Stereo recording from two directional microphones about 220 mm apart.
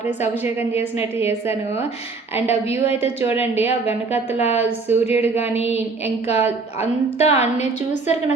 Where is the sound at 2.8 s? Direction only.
25° left (ahead or behind).